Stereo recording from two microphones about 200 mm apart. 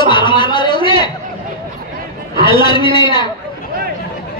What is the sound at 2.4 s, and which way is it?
Speech, 25° left (ahead or behind).